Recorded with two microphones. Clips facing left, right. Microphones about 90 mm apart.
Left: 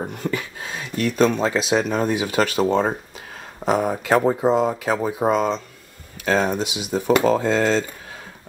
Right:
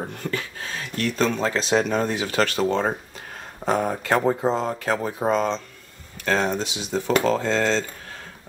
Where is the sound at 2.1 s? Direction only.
15° left (ahead or behind).